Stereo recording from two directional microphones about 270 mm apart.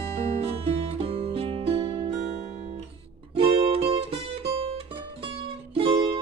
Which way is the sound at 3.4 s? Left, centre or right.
Right.